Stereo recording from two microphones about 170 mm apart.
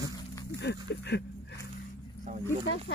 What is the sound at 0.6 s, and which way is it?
Speech, 80° left.